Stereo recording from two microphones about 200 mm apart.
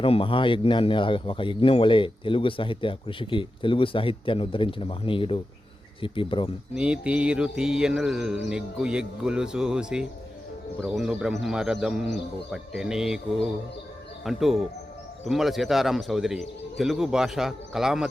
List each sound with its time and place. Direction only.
0.0 s speech: 25° left (ahead or behind)
6.7 s speech: 5° right (ahead or behind)